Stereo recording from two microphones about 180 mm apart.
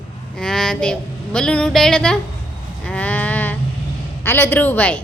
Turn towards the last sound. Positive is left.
turn(degrees=10)  # may be behind; listen again after turning